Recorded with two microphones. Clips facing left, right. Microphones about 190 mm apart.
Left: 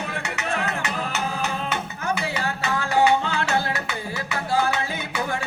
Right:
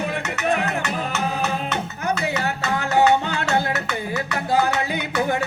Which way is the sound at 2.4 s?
20° right (ahead or behind).